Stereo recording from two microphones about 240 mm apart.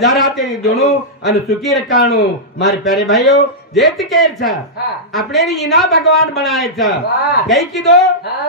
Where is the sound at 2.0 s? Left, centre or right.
Left.